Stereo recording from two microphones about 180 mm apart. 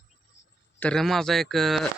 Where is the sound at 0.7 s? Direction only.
5° left (ahead or behind).